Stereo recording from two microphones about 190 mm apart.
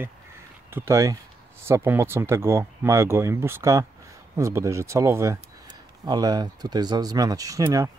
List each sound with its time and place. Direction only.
0.7 s speech: 15° right (ahead or behind)